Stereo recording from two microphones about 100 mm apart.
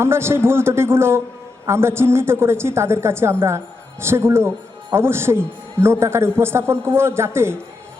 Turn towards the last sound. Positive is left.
turn(degrees=-25)  # may be behind; listen again after turning